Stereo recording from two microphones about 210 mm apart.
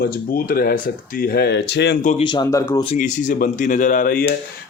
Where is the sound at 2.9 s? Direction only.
35° left (ahead or behind).